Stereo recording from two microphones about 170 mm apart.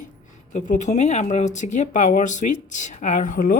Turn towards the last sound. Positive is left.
turn(degrees=50)  # may be behind; listen again after turning